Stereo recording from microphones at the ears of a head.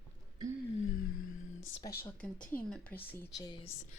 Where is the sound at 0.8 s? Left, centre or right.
Left.